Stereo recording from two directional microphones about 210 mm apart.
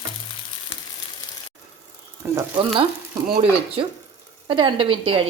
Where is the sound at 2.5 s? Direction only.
25° right (ahead or behind).